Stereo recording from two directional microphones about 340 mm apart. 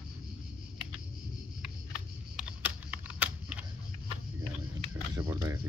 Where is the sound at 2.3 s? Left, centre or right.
Centre.